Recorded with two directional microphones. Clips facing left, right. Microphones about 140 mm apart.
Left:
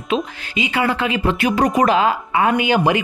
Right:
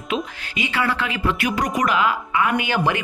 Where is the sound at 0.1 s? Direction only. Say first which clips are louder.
Left 5 dB; 20° left (ahead or behind).